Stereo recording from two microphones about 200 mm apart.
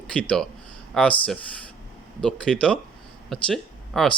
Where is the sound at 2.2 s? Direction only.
5° left (ahead or behind).